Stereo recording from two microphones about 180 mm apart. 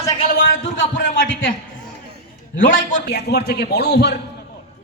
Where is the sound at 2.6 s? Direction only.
55° left (ahead or behind).